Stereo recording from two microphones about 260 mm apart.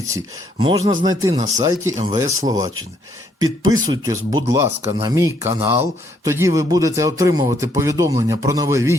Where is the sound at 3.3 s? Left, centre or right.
Centre.